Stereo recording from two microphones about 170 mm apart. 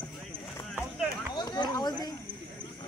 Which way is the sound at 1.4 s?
25° left (ahead or behind).